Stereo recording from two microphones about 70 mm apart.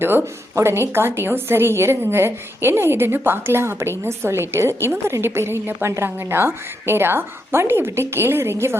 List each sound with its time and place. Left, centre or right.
0.0 s a woman's voice: right